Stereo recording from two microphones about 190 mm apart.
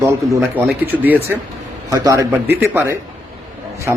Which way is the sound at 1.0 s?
10° right (ahead or behind).